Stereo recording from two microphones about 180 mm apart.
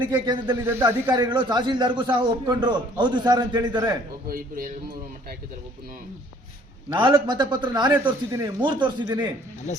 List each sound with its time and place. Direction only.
0.0 s a man's voice: 25° right (ahead or behind)
0.6 s a man's voice: 15° right (ahead or behind)
4.3 s speech: 55° right (ahead or behind)
7.0 s a man's voice: 25° right (ahead or behind)